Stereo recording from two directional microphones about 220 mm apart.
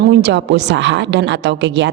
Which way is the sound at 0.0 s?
50° right (ahead or behind).